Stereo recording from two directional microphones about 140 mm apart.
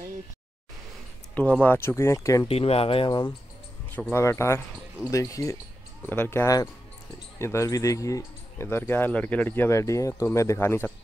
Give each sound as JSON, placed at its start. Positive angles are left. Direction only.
{"t": 1.3, "sound": "speech", "side_deg": 10}
{"t": 2.4, "sound": "speech", "side_deg": 45}
{"t": 3.9, "sound": "speech", "side_deg": 15}